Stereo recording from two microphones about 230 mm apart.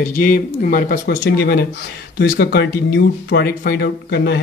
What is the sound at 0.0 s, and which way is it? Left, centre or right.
Speech, left.